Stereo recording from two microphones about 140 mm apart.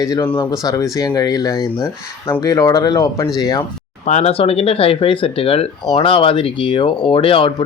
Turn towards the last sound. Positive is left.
turn(degrees=40)  # may be behind; listen again after turning